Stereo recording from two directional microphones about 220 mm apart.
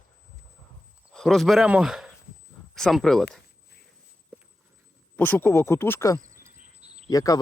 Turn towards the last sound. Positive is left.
turn(degrees=15)  # may be behind; listen again after turning